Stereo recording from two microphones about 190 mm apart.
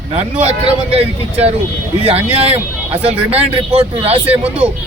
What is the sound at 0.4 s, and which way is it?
Speech, 30° right (ahead or behind).